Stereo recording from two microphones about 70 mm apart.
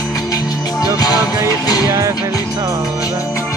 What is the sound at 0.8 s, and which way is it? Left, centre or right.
Music, left.